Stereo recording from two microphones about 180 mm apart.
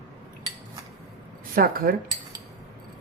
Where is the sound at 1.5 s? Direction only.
55° right (ahead or behind).